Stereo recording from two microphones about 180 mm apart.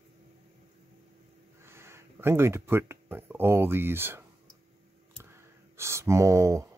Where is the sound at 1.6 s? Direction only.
15° right (ahead or behind).